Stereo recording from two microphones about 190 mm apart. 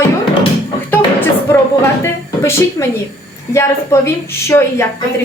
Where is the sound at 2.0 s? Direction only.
15° left (ahead or behind).